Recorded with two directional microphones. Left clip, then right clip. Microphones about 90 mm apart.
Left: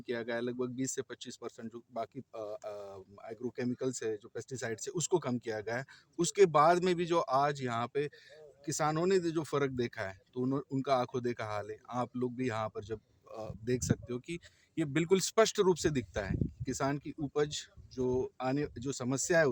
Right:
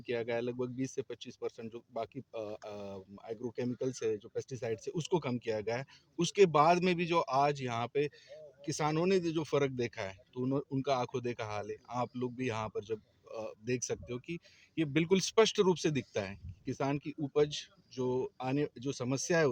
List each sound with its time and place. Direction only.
0.0 s speech: 30° left (ahead or behind)